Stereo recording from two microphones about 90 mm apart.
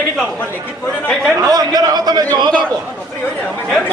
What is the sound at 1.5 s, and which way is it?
A man's voice, 45° right (ahead or behind).